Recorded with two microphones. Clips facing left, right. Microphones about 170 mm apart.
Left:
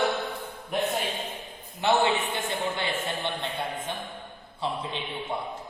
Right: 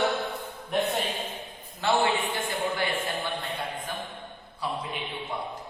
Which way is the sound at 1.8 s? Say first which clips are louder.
Left 1 dB; 20° left (ahead or behind).